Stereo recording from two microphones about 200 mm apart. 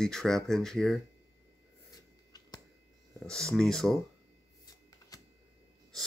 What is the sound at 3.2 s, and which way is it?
Speech, 5° left (ahead or behind).